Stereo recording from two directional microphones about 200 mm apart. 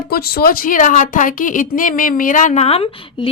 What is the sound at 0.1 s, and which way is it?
A woman's voice, 50° left (ahead or behind).